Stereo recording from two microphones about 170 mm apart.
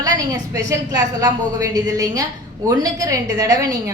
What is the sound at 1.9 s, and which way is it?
A woman's voice, 20° right (ahead or behind).